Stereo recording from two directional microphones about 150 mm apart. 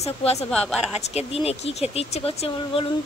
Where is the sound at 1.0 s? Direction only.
45° left (ahead or behind).